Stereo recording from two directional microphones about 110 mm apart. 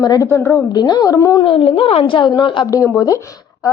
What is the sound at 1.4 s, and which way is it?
A woman's voice, 55° left (ahead or behind).